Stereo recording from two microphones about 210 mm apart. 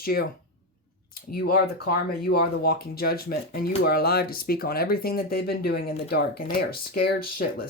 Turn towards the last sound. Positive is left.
turn(degrees=45)  # may be behind; listen again after turning